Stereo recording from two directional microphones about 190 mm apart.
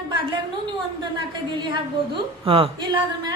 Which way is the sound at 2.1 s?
30° right (ahead or behind).